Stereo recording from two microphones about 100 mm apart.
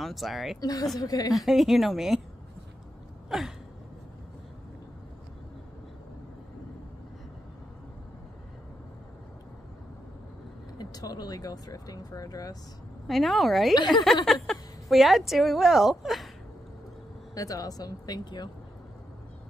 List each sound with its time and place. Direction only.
0.0 s a woman's voice: centre (ahead or behind)
0.6 s speech: 40° left (ahead or behind)
1.3 s a woman's voice: centre (ahead or behind)
3.3 s sigh: 5° right (ahead or behind)
10.8 s speech: 40° left (ahead or behind)
13.0 s a woman's voice: centre (ahead or behind)
13.7 s a woman's voice: 45° left (ahead or behind)
14.2 s a woman's voice: 5° left (ahead or behind)
17.3 s speech: 35° left (ahead or behind)